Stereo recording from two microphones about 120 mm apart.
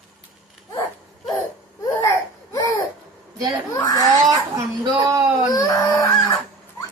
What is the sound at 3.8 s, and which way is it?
Speech, 30° left (ahead or behind).